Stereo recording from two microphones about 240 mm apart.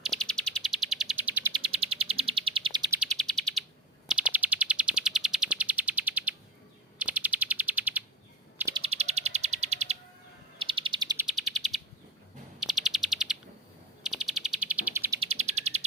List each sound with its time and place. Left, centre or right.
0.0 s bird: centre
1.6 s bird: right
3.0 s chirp: centre
7.0 s bird: centre
8.8 s bird: right
11.3 s bird: centre
15.2 s bird: right